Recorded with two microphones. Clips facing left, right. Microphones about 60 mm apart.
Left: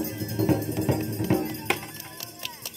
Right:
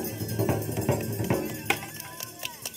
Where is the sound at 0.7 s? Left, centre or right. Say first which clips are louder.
Left 2 dB; right.